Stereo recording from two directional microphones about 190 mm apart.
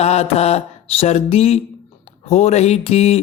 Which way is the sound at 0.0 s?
35° left (ahead or behind).